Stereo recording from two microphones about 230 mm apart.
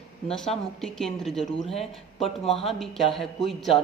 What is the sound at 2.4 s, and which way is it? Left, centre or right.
Speech, left.